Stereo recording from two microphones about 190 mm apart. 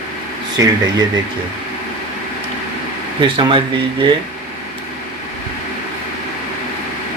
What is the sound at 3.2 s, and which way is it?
Speech, 25° right (ahead or behind).